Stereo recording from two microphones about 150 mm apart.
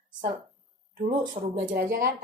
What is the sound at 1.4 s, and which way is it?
Speech, 50° right (ahead or behind).